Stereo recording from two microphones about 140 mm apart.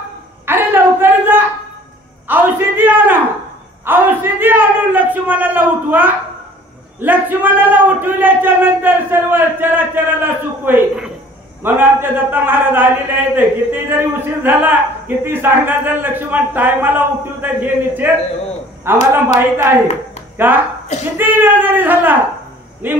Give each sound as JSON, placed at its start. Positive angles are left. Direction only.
{"t": 0.5, "sound": "a sound", "side_deg": -15}
{"t": 7.0, "sound": "a man's voice", "side_deg": -15}
{"t": 20.3, "sound": "a man's voice", "side_deg": -15}